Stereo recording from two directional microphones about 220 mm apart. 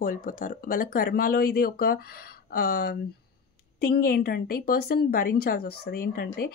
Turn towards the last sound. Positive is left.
turn(degrees=45)  # may be behind; listen again after turning